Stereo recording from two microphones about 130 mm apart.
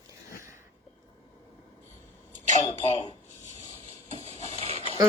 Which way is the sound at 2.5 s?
50° left (ahead or behind).